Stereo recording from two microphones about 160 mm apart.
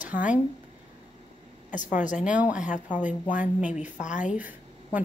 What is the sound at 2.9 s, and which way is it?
Speech, 10° right (ahead or behind).